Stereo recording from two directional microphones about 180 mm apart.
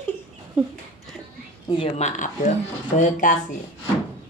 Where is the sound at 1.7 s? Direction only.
35° left (ahead or behind).